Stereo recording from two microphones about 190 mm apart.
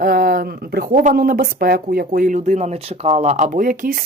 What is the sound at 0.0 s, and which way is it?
Speech, 50° right (ahead or behind).